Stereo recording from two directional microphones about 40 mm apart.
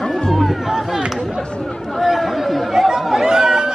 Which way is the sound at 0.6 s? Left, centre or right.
Centre.